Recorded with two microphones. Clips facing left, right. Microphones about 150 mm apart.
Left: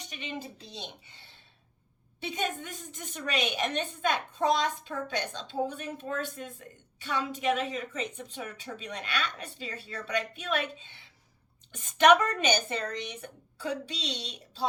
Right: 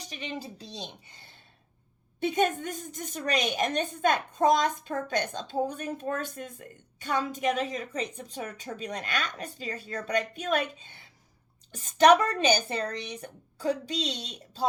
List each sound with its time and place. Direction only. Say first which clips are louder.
0.0 s a woman's voice: right 2 dB; 35° right (ahead or behind)